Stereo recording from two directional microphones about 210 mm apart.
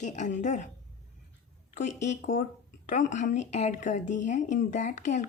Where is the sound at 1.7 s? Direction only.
35° left (ahead or behind).